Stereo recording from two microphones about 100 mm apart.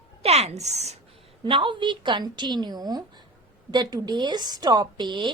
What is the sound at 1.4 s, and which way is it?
A woman's voice, 55° right (ahead or behind).